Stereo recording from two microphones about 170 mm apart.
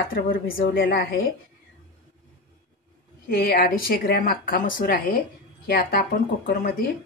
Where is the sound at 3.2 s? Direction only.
65° left (ahead or behind).